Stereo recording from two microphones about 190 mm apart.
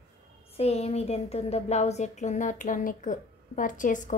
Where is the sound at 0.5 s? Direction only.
35° left (ahead or behind).